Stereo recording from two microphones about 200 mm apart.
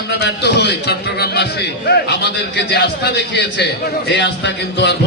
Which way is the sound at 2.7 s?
55° left (ahead or behind).